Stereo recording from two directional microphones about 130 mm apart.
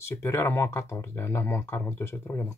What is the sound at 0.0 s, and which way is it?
Speech, 20° left (ahead or behind).